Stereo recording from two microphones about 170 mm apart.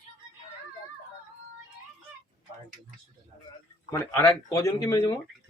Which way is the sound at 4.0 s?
20° left (ahead or behind).